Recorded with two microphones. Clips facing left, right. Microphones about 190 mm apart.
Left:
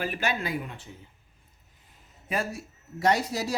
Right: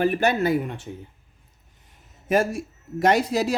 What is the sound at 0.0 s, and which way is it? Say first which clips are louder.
Speech: right 9 dB; 65° right (ahead or behind).